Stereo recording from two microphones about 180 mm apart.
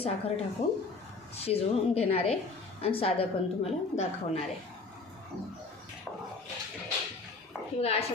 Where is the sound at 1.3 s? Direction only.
35° left (ahead or behind).